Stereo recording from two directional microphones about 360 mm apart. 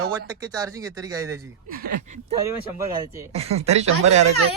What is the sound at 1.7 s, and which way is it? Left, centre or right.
Speech, right.